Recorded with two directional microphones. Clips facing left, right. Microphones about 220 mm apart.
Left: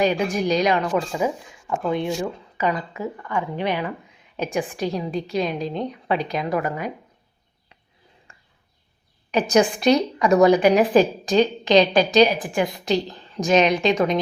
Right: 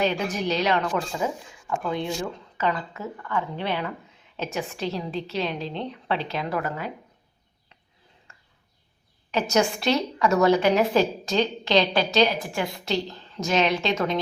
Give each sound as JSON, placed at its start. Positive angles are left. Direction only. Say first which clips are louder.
{"t": 0.0, "sound": "a woman's voice", "louder": "left 4 dB", "side_deg": 15}
{"t": 8.3, "sound": "a sound", "louder": "left 2 dB", "side_deg": 15}
{"t": 9.5, "sound": "a woman's voice", "louder": "left 6 dB", "side_deg": 15}